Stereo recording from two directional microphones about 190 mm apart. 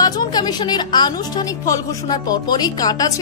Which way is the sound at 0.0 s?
20° left (ahead or behind).